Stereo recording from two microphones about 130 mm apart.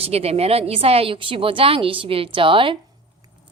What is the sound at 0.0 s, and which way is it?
A woman's voice, 50° right (ahead or behind).